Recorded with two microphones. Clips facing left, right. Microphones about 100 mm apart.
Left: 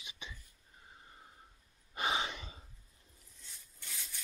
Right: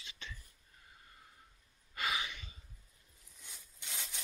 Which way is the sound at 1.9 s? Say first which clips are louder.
Left 3 dB; 25° left (ahead or behind).